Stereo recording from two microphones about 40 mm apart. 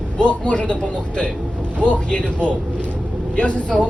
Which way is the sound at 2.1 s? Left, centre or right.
Left.